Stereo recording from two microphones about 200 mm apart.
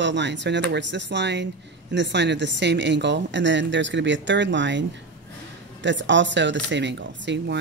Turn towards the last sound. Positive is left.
turn(degrees=-60)  # may be behind; listen again after turning